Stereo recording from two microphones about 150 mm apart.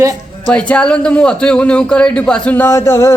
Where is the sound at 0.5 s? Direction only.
5° left (ahead or behind).